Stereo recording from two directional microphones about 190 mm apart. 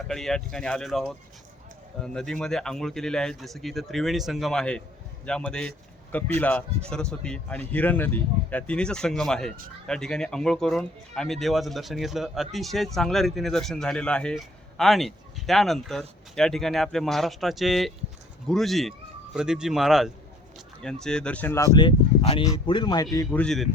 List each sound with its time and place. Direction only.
0.1 s speech: centre (ahead or behind); by 23.0 s 20° left (ahead or behind)
23.3 s speech: 5° left (ahead or behind)